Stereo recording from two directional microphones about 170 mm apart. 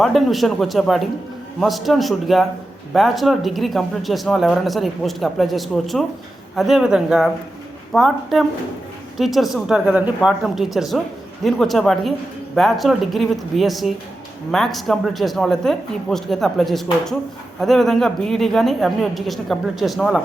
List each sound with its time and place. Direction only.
0.0 s speech: centre (ahead or behind)